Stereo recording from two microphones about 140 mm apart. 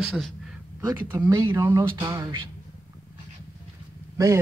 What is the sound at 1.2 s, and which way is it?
Speech, 20° right (ahead or behind).